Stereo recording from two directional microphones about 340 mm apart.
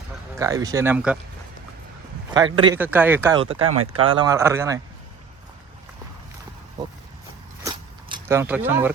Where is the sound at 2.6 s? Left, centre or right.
Centre.